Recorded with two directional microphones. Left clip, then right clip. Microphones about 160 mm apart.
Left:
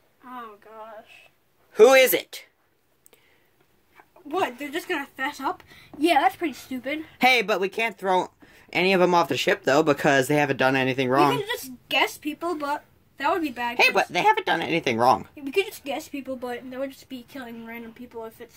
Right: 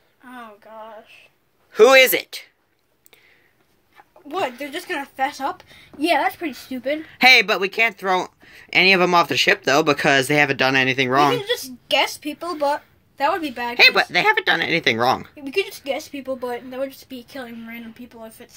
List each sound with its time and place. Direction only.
1.7 s speech: centre (ahead or behind)
3.9 s speech: 45° right (ahead or behind)
5.9 s a woman's voice: 30° right (ahead or behind)
7.1 s speech: 5° left (ahead or behind)
11.4 s speech: 50° right (ahead or behind)
13.7 s speech: centre (ahead or behind)
15.3 s speech: 40° right (ahead or behind); by 18.3 s 60° right (ahead or behind)